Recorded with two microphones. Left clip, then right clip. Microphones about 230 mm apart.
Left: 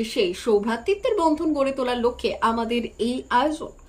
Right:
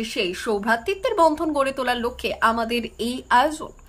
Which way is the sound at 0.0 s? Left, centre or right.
Centre.